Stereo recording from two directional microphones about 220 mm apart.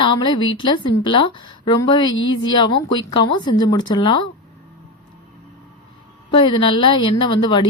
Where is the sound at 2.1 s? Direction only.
60° left (ahead or behind).